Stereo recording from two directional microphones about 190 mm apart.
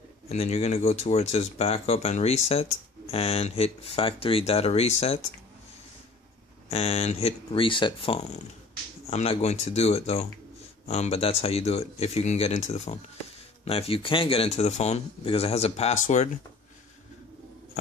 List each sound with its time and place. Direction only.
0.3 s speech: 35° left (ahead or behind)
6.7 s speech: 35° left (ahead or behind)